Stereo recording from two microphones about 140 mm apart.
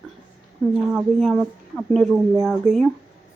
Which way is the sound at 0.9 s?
Centre (ahead or behind).